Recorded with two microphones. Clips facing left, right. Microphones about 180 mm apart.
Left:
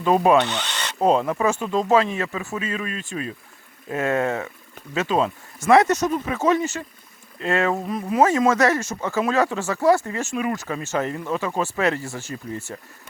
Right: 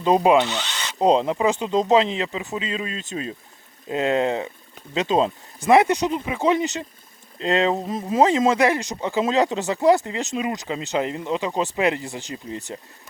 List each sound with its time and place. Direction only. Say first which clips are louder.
0.0 s speech: even; 20° right (ahead or behind)
0.5 s speech: left 1 dB; 10° right (ahead or behind)